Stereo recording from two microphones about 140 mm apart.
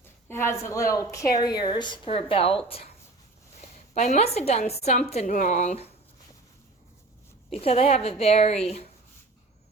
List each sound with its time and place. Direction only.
0.3 s a woman's voice: 20° left (ahead or behind)
2.0 s a woman's voice: 45° left (ahead or behind)
3.9 s a woman's voice: 55° left (ahead or behind)
7.5 s a woman's voice: 50° left (ahead or behind)